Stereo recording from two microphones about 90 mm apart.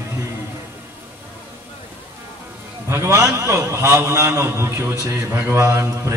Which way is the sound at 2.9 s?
30° right (ahead or behind).